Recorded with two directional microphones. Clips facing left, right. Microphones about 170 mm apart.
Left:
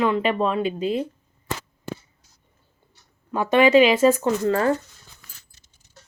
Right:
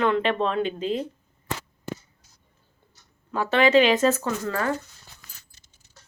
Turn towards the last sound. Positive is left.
turn(degrees=30)  # may be behind; listen again after turning